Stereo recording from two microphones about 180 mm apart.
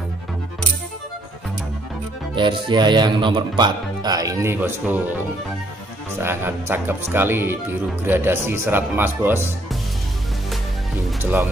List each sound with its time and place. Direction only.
2.3 s speech: 25° right (ahead or behind); by 5.0 s 10° right (ahead or behind)
6.1 s speech: 10° right (ahead or behind)